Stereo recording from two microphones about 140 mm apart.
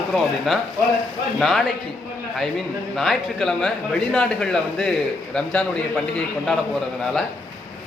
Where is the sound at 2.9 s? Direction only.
Centre (ahead or behind).